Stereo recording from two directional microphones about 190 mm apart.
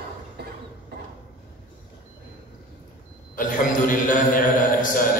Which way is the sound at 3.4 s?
45° left (ahead or behind).